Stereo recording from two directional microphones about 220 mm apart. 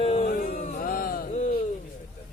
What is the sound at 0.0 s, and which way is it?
Music, 30° left (ahead or behind).